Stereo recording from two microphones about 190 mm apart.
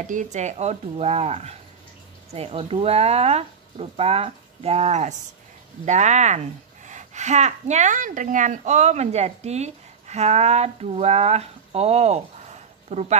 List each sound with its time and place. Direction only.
0.0 s a woman's voice: 40° right (ahead or behind)